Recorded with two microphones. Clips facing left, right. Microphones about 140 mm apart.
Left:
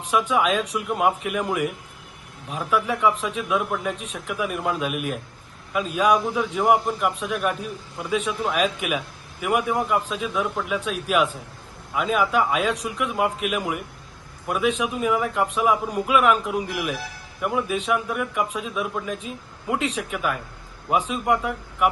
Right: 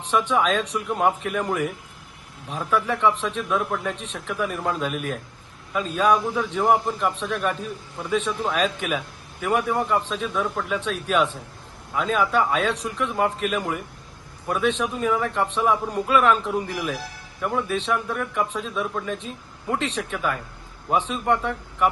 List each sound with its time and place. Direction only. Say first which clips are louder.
0.0 s a man's voice: even; 10° left (ahead or behind)